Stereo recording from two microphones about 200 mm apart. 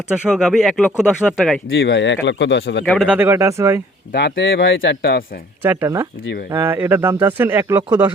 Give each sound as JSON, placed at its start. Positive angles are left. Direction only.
{"t": 0.1, "sound": "speech", "side_deg": 0}
{"t": 1.7, "sound": "speech", "side_deg": 60}
{"t": 2.8, "sound": "speech", "side_deg": 0}
{"t": 4.1, "sound": "speech", "side_deg": 60}
{"t": 5.6, "sound": "speech", "side_deg": -10}